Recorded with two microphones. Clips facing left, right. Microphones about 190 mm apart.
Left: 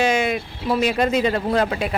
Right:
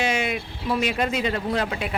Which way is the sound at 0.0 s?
40° left (ahead or behind).